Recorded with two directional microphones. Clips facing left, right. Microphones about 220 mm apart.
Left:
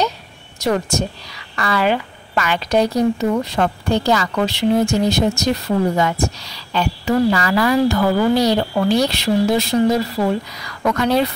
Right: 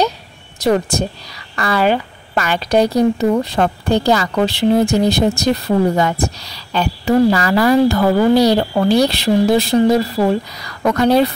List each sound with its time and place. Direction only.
0.6 s a woman's voice: 35° right (ahead or behind)